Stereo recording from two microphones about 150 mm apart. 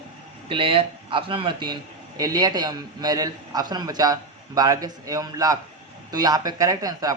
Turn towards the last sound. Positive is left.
turn(degrees=-25)  # may be behind; listen again after turning